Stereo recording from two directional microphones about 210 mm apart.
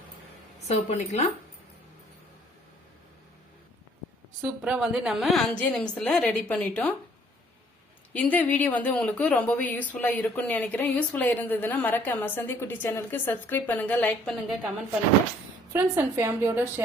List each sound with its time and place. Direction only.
0.7 s speech: 30° left (ahead or behind)
4.4 s a woman's voice: 5° right (ahead or behind)
8.1 s speech: 5° left (ahead or behind)
15.7 s a woman's voice: 10° right (ahead or behind)